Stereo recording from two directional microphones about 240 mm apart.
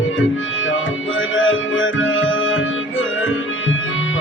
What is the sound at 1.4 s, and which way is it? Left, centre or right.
Music, left.